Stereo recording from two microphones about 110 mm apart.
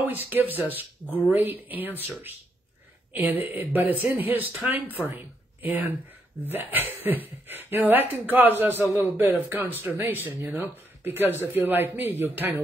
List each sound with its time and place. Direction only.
0.0 s speech: 15° right (ahead or behind)